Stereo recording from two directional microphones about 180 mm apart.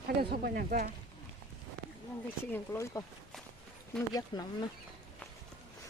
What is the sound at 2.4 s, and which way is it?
Speech, 15° left (ahead or behind).